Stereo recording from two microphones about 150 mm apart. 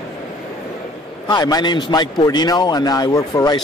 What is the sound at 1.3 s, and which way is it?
Speech, 25° left (ahead or behind).